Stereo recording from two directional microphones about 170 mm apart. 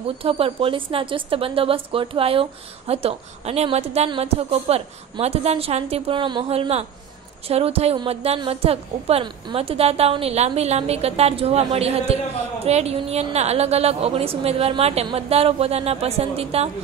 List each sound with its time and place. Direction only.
0.2 s a woman's voice: 35° right (ahead or behind)